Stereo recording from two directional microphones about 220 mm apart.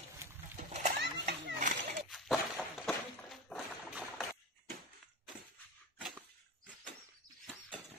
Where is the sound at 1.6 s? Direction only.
35° right (ahead or behind).